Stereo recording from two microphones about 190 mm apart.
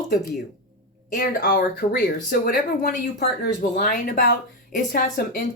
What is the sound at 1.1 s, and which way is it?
Speech, 50° left (ahead or behind).